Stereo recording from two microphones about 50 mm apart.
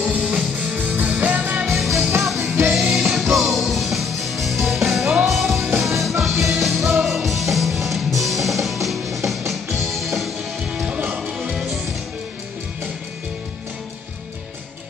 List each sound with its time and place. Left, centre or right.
0.0 s music: right
2.2 s music: centre
10.7 s music: centre